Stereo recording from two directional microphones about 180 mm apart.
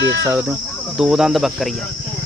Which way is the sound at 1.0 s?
Centre (ahead or behind).